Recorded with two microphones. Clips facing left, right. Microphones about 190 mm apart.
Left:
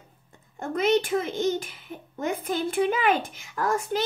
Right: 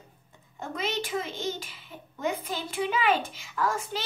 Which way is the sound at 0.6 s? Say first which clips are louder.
Left 9 dB; 55° left (ahead or behind).